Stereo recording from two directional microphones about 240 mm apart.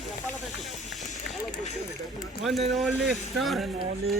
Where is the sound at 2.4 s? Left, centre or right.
Centre.